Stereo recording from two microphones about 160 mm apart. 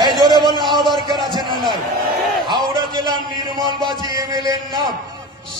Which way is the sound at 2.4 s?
30° right (ahead or behind).